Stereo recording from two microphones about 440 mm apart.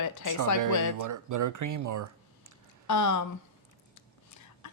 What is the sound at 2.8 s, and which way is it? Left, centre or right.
Speech, left.